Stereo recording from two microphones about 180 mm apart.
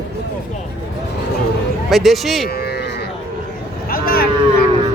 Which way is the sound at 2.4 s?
60° left (ahead or behind).